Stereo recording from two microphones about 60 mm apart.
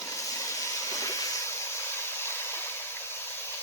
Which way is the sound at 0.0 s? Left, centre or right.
Left.